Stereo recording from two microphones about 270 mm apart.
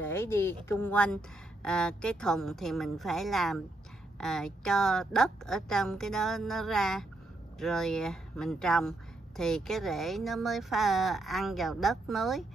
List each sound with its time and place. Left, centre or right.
0.0 s speech: centre